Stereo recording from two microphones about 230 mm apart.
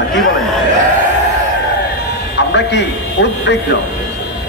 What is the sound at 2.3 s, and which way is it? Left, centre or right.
A man's voice, left.